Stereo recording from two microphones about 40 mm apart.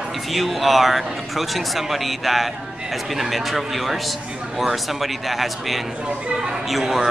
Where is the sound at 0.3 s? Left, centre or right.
Centre.